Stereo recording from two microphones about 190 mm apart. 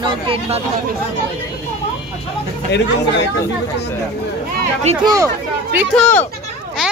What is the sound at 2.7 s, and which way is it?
Speech, 65° left (ahead or behind).